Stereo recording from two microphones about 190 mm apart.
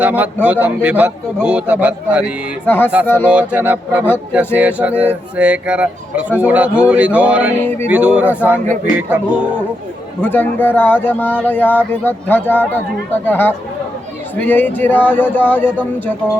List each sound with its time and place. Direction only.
0.0 s a man's voice: 10° right (ahead or behind)
2.6 s speech: 10° left (ahead or behind)
3.2 s a man's voice: 10° right (ahead or behind)
10.2 s speech: 10° left (ahead or behind)